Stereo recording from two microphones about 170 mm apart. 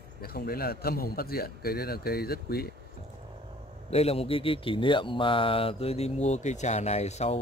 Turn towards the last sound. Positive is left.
turn(degrees=40)  # may be behind; listen again after turning